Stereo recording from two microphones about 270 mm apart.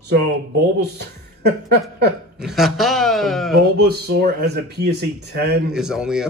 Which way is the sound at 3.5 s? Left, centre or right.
Right.